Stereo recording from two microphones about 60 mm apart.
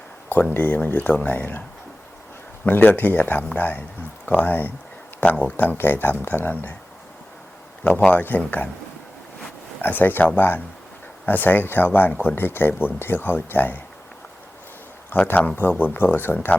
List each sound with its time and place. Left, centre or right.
0.5 s speech: left
2.6 s speech: left
8.4 s speech: left
9.8 s speech: left
15.1 s speech: left